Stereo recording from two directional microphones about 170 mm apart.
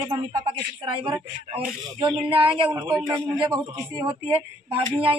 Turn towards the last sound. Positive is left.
turn(degrees=-30)  # may be behind; listen again after turning